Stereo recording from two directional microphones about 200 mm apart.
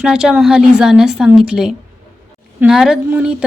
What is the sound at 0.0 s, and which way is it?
A woman's voice, 5° right (ahead or behind).